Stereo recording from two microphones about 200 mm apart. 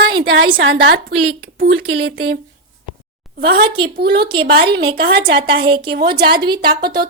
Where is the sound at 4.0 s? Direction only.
55° right (ahead or behind).